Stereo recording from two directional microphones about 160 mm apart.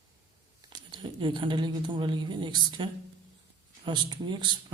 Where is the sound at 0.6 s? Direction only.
25° right (ahead or behind).